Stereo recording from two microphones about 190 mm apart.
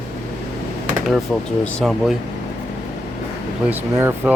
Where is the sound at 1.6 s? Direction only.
Centre (ahead or behind).